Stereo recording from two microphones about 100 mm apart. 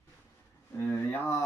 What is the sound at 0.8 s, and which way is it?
Speech, 20° left (ahead or behind).